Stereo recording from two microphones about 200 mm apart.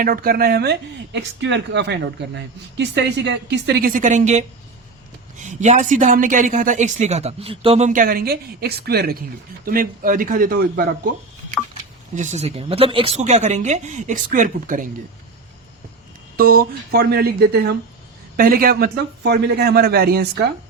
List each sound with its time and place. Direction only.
0.0 s a man's voice: 45° right (ahead or behind)
12.1 s speech: 35° right (ahead or behind)
16.4 s a man's voice: 45° right (ahead or behind)